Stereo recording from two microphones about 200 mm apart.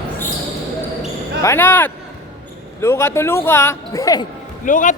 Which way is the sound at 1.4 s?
10° left (ahead or behind).